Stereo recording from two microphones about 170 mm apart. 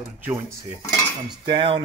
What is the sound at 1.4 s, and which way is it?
Speech, 25° right (ahead or behind).